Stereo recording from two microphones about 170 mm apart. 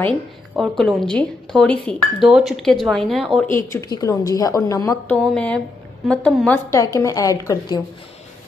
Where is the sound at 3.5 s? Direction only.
15° left (ahead or behind).